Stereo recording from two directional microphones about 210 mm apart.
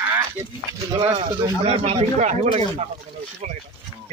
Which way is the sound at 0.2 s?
15° right (ahead or behind).